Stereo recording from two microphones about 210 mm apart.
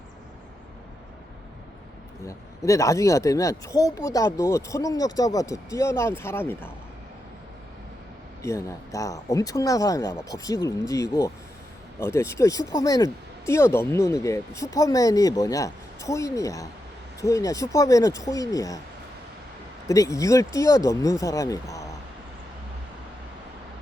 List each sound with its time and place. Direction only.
2.2 s speech: 15° left (ahead or behind)
8.4 s speech: 15° left (ahead or behind)
19.9 s speech: 15° left (ahead or behind)